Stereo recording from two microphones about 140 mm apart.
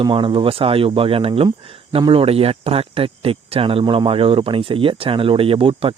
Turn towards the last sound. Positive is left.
turn(degrees=-40)  # may be behind; listen again after turning